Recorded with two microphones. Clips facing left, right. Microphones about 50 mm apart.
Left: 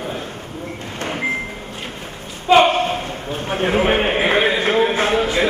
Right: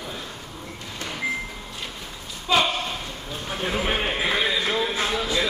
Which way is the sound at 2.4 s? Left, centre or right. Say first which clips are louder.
Left 10 dB; left.